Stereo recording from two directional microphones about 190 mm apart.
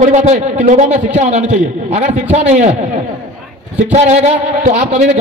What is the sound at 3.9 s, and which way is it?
A man's voice, 35° right (ahead or behind).